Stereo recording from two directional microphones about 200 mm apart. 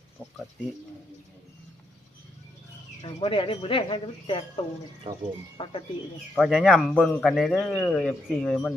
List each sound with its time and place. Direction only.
3.0 s speech: 30° left (ahead or behind)
5.1 s speech: 30° right (ahead or behind)
5.6 s speech: 30° left (ahead or behind)
6.3 s a man's voice: centre (ahead or behind)